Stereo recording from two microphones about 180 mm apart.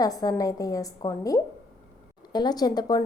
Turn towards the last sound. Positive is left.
turn(degrees=20)  # may be behind; listen again after turning